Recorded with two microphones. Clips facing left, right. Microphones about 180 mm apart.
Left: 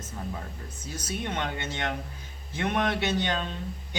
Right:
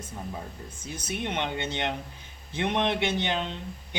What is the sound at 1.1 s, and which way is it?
Speech, 20° right (ahead or behind).